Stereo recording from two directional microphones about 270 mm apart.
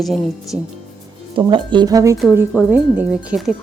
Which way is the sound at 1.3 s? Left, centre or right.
Centre.